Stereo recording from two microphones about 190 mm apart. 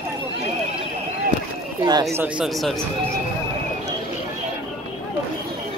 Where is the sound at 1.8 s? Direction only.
20° right (ahead or behind).